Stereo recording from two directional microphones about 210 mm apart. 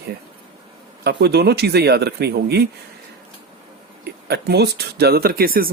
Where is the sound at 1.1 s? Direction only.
50° right (ahead or behind).